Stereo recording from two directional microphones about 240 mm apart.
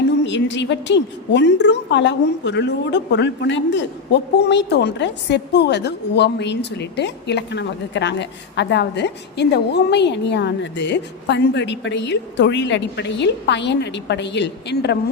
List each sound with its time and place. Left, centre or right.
0.3 s a woman's voice: left